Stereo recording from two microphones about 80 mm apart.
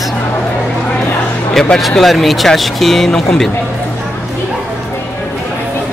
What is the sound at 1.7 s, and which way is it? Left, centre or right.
Speech, centre.